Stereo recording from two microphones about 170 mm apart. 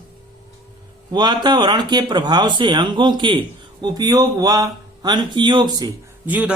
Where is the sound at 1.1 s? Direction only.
25° right (ahead or behind).